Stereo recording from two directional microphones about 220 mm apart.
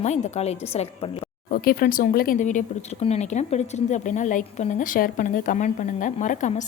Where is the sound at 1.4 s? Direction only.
40° left (ahead or behind).